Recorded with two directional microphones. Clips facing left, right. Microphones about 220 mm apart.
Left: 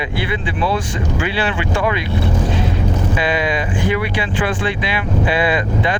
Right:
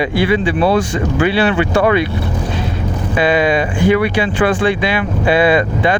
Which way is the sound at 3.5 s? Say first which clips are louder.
Right 6 dB; 55° right (ahead or behind).